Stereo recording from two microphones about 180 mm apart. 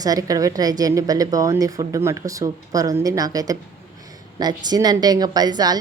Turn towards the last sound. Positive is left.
turn(degrees=-20)  # may be behind; listen again after turning